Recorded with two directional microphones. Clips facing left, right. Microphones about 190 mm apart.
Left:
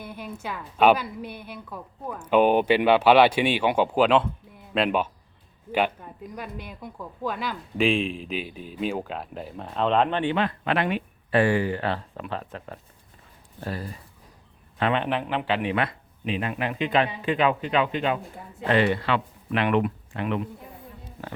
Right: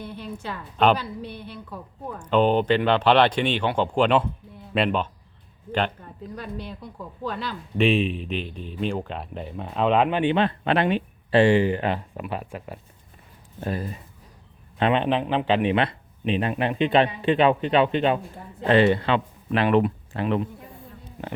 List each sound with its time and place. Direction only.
0.0 s speech: 10° left (ahead or behind)
5.7 s speech: 10° left (ahead or behind)
7.9 s speech: centre (ahead or behind)
10.2 s speech: 25° right (ahead or behind)